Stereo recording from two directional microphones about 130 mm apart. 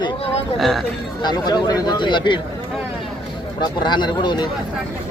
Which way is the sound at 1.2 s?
35° left (ahead or behind).